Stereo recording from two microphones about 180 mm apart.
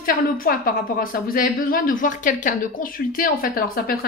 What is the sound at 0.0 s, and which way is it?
A woman's voice, 50° left (ahead or behind).